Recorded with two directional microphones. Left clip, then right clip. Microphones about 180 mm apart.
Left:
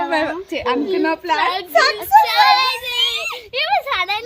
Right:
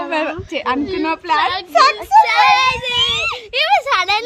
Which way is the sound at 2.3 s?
50° right (ahead or behind).